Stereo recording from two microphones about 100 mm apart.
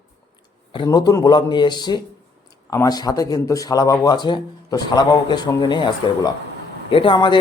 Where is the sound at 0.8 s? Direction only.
35° left (ahead or behind).